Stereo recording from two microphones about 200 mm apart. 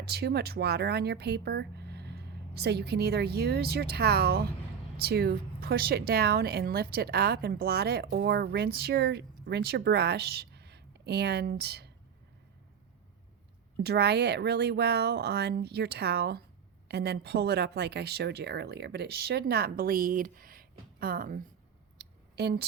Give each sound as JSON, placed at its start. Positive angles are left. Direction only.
{"t": 0.0, "sound": "speech", "side_deg": -55}
{"t": 13.8, "sound": "speech", "side_deg": -55}
{"t": 21.9, "sound": "a sound", "side_deg": -55}